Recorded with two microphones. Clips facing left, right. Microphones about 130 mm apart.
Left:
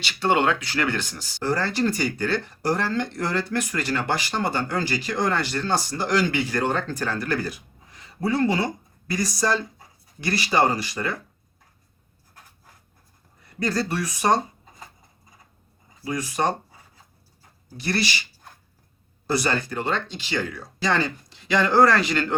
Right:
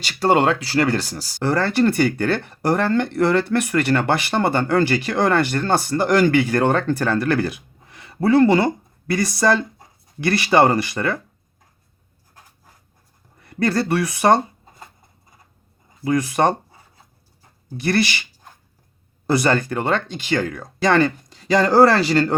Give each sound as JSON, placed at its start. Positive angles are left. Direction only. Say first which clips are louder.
{"t": 0.0, "sound": "speech", "louder": "right 4 dB", "side_deg": -40}
{"t": 1.4, "sound": "speech", "louder": "right 5 dB", "side_deg": -60}
{"t": 13.4, "sound": "speech", "louder": "right 5 dB", "side_deg": -60}
{"t": 16.0, "sound": "speech", "louder": "right 7 dB", "side_deg": -55}
{"t": 17.7, "sound": "speech", "louder": "right 6 dB", "side_deg": -55}
{"t": 19.3, "sound": "speech", "louder": "right 6 dB", "side_deg": -55}